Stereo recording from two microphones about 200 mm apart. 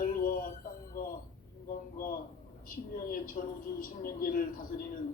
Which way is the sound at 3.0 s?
45° left (ahead or behind).